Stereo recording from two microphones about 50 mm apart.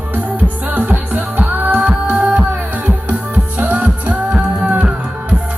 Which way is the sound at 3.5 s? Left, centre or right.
Right.